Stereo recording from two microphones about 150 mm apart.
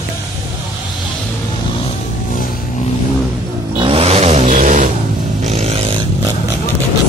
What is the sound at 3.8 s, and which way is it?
Vehicle, 40° right (ahead or behind).